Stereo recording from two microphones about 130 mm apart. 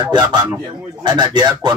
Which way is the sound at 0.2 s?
30° right (ahead or behind).